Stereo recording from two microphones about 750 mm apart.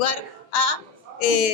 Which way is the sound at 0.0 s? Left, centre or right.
Left.